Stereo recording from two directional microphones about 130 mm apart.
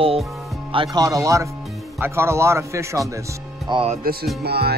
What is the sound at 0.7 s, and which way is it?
A man's voice, 30° right (ahead or behind).